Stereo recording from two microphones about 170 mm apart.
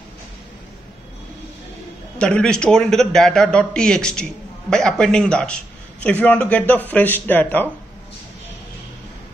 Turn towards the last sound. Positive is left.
turn(degrees=10)  # may be behind; listen again after turning